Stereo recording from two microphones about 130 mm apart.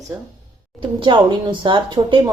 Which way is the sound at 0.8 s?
40° right (ahead or behind).